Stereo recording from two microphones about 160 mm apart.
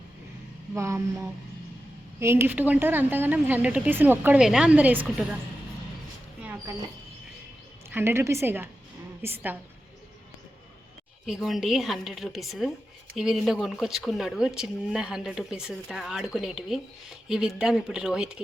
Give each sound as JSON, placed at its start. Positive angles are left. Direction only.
{"t": 0.7, "sound": "a woman's voice", "side_deg": -15}
{"t": 6.4, "sound": "a sound", "side_deg": -10}
{"t": 7.9, "sound": "a woman's voice", "side_deg": -15}
{"t": 11.3, "sound": "speech", "side_deg": 0}